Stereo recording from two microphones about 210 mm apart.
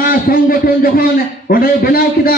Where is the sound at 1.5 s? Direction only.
45° left (ahead or behind).